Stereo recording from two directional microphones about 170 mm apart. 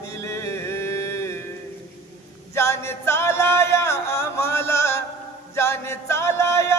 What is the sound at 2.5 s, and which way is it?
Music, 15° left (ahead or behind).